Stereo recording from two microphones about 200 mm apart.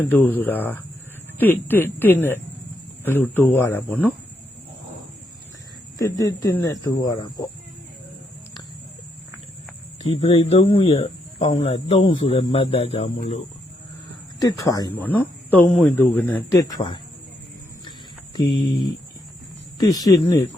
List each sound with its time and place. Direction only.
0.0 s speech: 10° left (ahead or behind)
6.0 s speech: 20° left (ahead or behind)
10.2 s speech: 30° left (ahead or behind)
13.1 s speech: 45° left (ahead or behind)
14.4 s speech: 15° left (ahead or behind)
18.3 s speech: 20° left (ahead or behind)
19.8 s speech: 20° left (ahead or behind)